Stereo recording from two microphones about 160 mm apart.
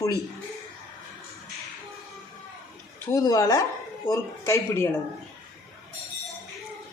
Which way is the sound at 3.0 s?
20° left (ahead or behind).